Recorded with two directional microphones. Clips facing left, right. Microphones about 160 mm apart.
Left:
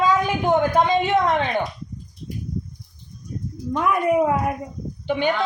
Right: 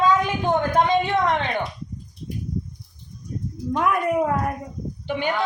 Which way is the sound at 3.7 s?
Centre (ahead or behind).